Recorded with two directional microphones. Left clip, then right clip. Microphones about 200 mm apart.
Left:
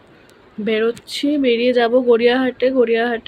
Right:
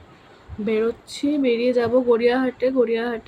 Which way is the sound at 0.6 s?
10° right (ahead or behind).